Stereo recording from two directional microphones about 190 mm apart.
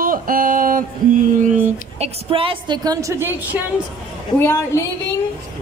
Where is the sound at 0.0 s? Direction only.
50° right (ahead or behind).